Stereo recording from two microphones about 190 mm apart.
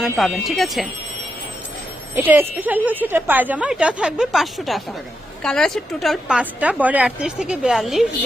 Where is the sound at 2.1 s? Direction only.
10° right (ahead or behind).